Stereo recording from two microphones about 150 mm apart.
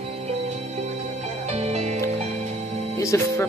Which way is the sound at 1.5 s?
50° right (ahead or behind).